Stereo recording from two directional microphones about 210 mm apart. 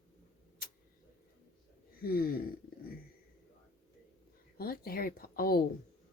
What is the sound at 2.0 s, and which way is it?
Speech, 45° left (ahead or behind).